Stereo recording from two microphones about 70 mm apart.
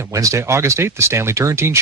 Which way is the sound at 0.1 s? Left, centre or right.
Right.